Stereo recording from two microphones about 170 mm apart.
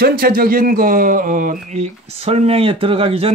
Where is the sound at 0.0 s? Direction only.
65° right (ahead or behind).